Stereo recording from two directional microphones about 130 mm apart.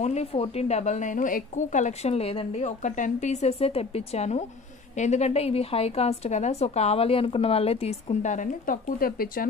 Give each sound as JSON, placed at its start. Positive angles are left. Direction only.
{"t": 0.0, "sound": "a woman's voice", "side_deg": 55}
{"t": 2.8, "sound": "a woman's voice", "side_deg": 70}